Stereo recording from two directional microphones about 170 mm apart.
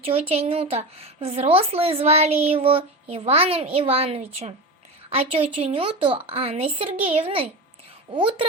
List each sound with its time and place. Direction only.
0.0 s a woman's voice: 35° right (ahead or behind)